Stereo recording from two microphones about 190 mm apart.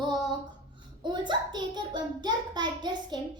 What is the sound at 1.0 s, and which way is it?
A child's voice, 25° right (ahead or behind).